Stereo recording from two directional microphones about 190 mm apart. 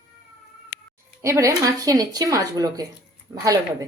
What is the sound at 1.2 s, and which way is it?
A woman's voice, 15° right (ahead or behind).